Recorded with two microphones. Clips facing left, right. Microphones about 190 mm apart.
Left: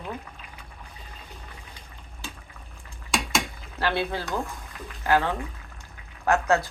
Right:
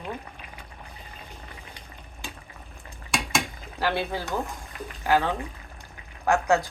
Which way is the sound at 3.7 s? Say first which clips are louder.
Even; 15° right (ahead or behind).